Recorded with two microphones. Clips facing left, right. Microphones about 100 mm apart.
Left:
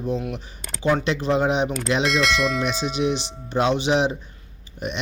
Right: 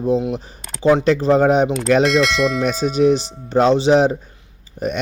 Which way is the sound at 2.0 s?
Centre (ahead or behind).